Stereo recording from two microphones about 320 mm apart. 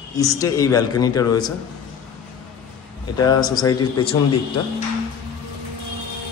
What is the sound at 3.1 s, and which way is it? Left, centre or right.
A man's voice, centre.